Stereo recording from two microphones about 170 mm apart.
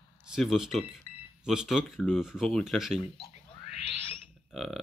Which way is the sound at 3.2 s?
35° left (ahead or behind).